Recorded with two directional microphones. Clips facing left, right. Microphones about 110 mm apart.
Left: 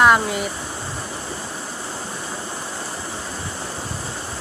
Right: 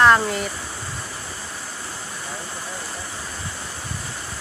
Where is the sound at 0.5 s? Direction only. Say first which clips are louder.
Left 3 dB; 25° left (ahead or behind).